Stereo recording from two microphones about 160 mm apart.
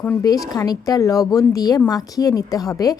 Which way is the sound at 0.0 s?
10° left (ahead or behind).